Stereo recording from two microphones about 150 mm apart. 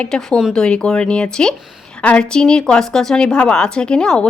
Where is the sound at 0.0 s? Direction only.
5° left (ahead or behind).